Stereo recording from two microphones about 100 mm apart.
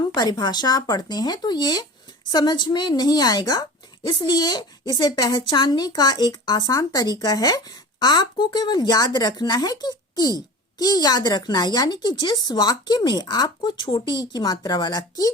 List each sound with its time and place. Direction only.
0.0 s a woman's voice: 40° left (ahead or behind)